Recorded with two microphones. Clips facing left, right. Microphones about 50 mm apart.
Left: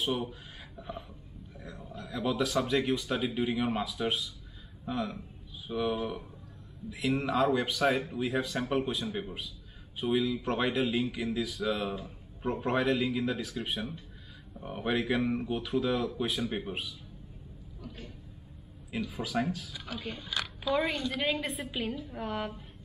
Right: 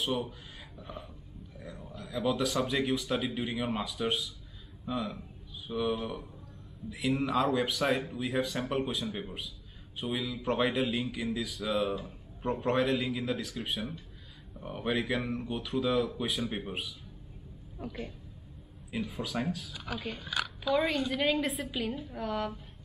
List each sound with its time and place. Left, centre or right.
0.7 s a man's voice: centre
17.7 s a woman's voice: right
18.9 s speech: centre
21.2 s a woman's voice: centre